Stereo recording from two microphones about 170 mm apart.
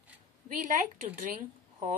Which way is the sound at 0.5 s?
50° right (ahead or behind).